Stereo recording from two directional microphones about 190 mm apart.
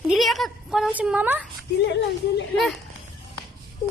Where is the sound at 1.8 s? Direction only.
65° left (ahead or behind).